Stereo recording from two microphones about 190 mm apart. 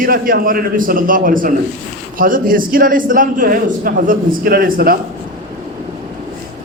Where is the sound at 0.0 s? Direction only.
50° right (ahead or behind).